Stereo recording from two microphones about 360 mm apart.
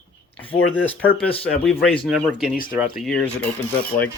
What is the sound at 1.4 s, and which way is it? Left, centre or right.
Speech, centre.